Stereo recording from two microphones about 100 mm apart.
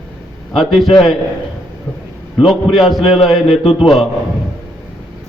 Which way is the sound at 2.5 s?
5° right (ahead or behind).